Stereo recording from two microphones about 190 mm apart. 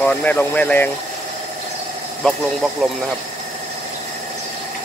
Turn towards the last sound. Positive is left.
turn(degrees=0)  # may be behind; listen again after turning